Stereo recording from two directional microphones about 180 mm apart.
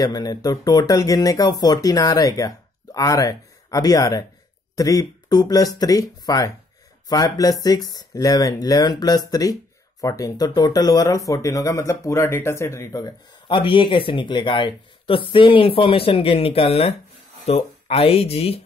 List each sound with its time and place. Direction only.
0.0 s speech: 20° left (ahead or behind)